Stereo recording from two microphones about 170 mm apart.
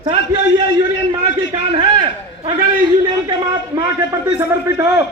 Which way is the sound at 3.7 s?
25° right (ahead or behind).